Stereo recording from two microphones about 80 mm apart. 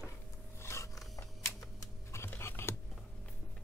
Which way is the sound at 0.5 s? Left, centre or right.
Left.